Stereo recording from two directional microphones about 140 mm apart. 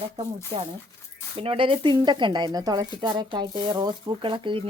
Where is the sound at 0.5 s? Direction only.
40° right (ahead or behind).